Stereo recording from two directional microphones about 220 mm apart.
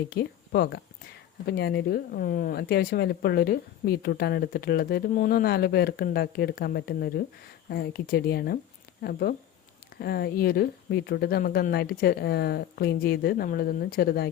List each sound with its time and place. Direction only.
0.1 s speech: 45° left (ahead or behind)